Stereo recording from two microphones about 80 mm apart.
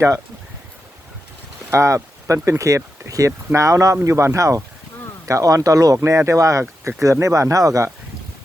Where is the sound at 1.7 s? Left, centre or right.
Right.